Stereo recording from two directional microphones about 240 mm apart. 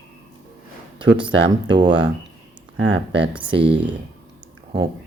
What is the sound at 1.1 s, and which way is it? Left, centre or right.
Speech, centre.